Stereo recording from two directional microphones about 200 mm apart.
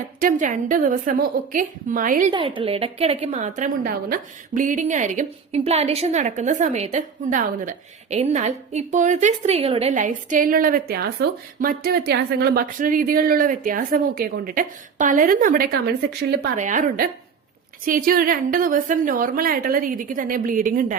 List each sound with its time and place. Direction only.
0.2 s a woman's voice: 40° right (ahead or behind)
2.3 s a woman's voice: 25° right (ahead or behind); by 20.9 s 40° right (ahead or behind)